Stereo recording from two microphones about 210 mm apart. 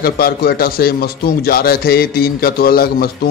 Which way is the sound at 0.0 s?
50° left (ahead or behind).